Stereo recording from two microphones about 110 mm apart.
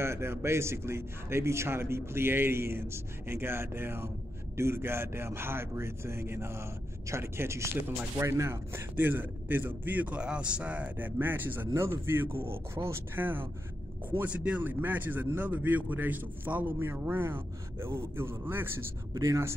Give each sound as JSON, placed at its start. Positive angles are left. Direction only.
{"t": 0.0, "sound": "a man's voice", "side_deg": -25}